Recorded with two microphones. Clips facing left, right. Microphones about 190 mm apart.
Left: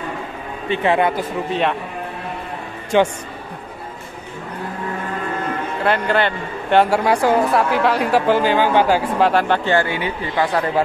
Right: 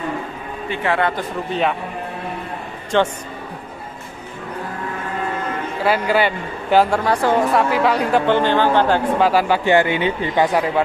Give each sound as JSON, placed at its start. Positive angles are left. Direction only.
{"t": 0.7, "sound": "a man's voice", "side_deg": 20}
{"t": 1.1, "sound": "a man's voice", "side_deg": 0}
{"t": 2.9, "sound": "a man's voice", "side_deg": 10}
{"t": 5.9, "sound": "a man's voice", "side_deg": -5}
{"t": 6.9, "sound": "a man's voice", "side_deg": 10}
{"t": 9.3, "sound": "a man's voice", "side_deg": -5}
{"t": 9.7, "sound": "speech", "side_deg": -20}